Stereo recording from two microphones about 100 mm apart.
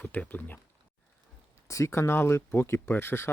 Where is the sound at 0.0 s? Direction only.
15° left (ahead or behind).